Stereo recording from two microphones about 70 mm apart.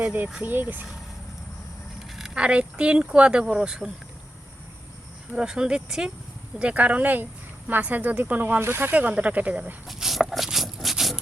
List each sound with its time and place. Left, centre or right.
0.0 s speech: right
2.0 s speech: centre
5.4 s speech: centre
9.8 s dog: centre